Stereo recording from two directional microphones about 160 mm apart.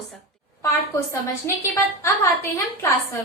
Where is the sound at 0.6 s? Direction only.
20° left (ahead or behind).